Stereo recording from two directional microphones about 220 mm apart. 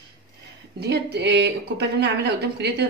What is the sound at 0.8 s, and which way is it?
Speech, 45° right (ahead or behind).